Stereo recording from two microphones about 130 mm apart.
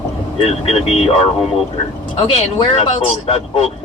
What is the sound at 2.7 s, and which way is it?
Speech, 50° left (ahead or behind).